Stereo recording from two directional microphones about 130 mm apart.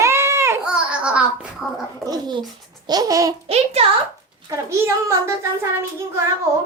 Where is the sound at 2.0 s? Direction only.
30° right (ahead or behind).